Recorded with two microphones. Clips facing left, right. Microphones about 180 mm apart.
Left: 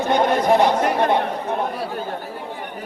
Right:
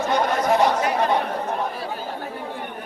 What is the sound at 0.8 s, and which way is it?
Chatter, 55° left (ahead or behind).